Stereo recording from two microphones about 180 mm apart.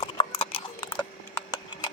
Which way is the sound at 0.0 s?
30° left (ahead or behind).